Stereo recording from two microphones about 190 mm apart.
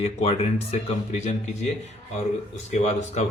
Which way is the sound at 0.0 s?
30° left (ahead or behind).